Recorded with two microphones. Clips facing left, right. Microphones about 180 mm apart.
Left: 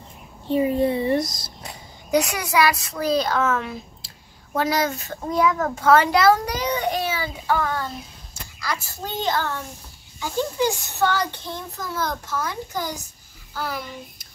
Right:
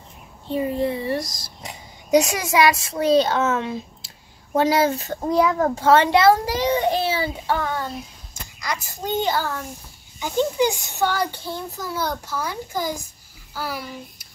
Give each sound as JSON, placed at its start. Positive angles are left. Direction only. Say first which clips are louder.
{"t": 0.5, "sound": "a child's voice", "louder": "left 3 dB", "side_deg": 15}
{"t": 1.6, "sound": "a child's voice", "louder": "right 3 dB", "side_deg": -20}
{"t": 10.2, "sound": "a child's voice", "louder": "right 3 dB", "side_deg": -15}